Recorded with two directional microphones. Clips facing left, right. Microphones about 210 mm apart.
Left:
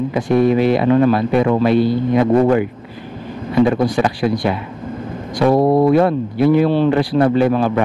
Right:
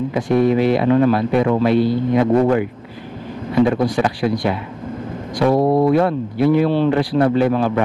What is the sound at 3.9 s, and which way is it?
Speech, 20° left (ahead or behind).